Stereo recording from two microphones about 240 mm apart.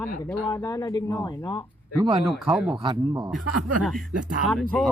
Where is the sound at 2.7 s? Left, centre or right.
Centre.